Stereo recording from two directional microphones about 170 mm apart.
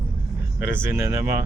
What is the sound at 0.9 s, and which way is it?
Speech, 15° right (ahead or behind).